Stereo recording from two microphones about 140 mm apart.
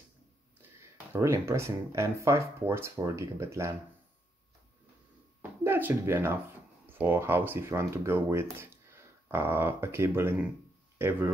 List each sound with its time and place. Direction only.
1.1 s speech: 20° right (ahead or behind)
5.4 s a sound: 15° right (ahead or behind)
6.9 s speech: 15° right (ahead or behind)